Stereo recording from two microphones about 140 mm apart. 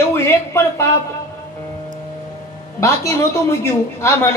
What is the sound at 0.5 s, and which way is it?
Speech, 20° left (ahead or behind).